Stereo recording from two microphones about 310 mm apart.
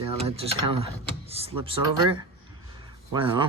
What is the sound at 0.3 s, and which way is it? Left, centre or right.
Speech, centre.